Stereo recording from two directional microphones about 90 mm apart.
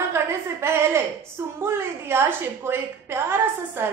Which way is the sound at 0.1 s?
30° right (ahead or behind).